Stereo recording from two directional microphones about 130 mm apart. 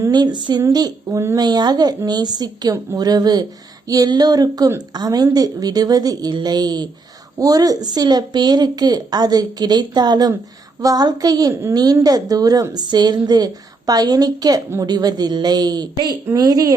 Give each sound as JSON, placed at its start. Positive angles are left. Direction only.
{"t": 0.0, "sound": "a woman's voice", "side_deg": -30}